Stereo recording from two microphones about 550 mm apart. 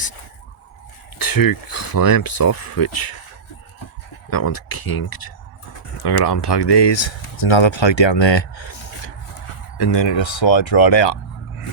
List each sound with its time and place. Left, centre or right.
1.2 s speech: left
4.3 s speech: left
9.7 s speech: left